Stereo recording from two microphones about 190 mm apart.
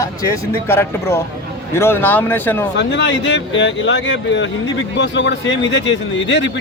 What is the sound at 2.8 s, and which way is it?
Speech, 70° left (ahead or behind).